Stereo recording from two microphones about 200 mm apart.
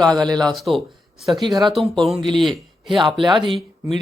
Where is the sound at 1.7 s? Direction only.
Centre (ahead or behind).